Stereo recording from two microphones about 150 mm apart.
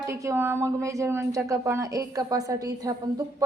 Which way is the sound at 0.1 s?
15° right (ahead or behind).